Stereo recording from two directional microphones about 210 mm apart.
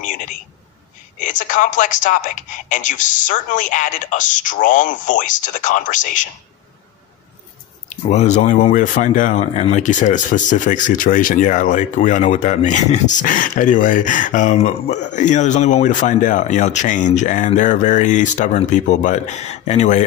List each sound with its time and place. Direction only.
0.0 s a sound: 40° left (ahead or behind)
1.2 s speech: 40° left (ahead or behind)
7.9 s speech: 35° left (ahead or behind)